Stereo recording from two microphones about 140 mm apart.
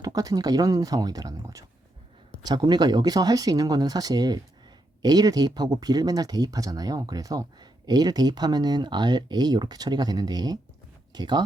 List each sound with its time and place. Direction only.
0.0 s speech: 25° right (ahead or behind)